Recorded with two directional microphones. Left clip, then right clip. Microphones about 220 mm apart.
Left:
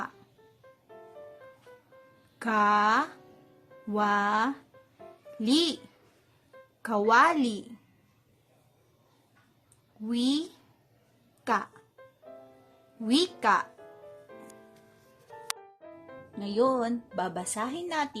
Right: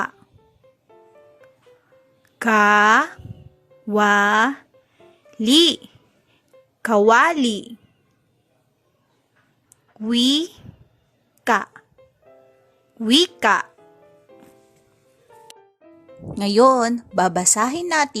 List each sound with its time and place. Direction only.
2.4 s speech: 25° right (ahead or behind)
6.8 s speech: 30° right (ahead or behind)
10.1 s speech: 30° right (ahead or behind)
11.4 s speech: 30° right (ahead or behind)
13.1 s speech: 25° right (ahead or behind)
16.3 s a woman's voice: 40° right (ahead or behind)